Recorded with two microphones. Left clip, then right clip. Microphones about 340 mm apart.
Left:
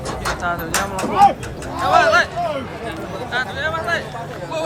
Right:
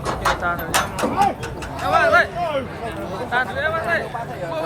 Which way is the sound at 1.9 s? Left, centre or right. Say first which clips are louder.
Left 2 dB; centre.